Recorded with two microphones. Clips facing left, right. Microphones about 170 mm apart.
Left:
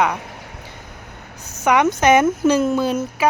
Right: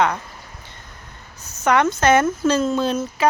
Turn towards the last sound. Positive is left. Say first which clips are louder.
# left 1 dB
turn(degrees=10)  # may be behind; listen again after turning